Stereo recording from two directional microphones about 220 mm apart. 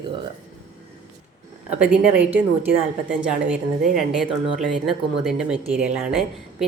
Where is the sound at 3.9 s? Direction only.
Centre (ahead or behind).